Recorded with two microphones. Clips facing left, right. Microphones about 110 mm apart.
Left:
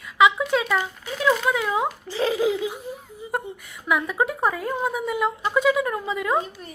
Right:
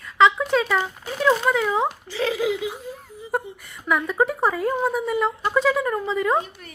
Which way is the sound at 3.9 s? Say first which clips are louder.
Right 2 dB; 5° left (ahead or behind).